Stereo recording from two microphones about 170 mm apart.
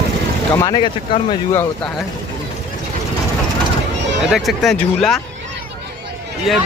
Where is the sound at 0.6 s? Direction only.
30° left (ahead or behind).